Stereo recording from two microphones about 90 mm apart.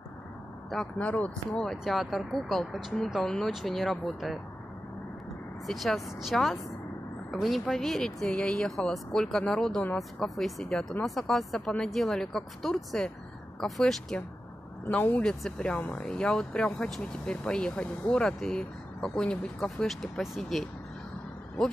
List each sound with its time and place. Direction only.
0.9 s speech: 15° left (ahead or behind)
1.5 s speech: centre (ahead or behind)
5.7 s speech: centre (ahead or behind)
14.9 s speech: 15° left (ahead or behind)